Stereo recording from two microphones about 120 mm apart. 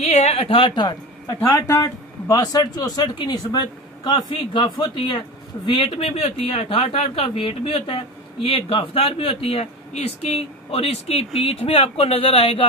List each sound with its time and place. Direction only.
0.0 s speech: 65° left (ahead or behind); by 5.2 s 40° left (ahead or behind)
5.9 s speech: 55° left (ahead or behind)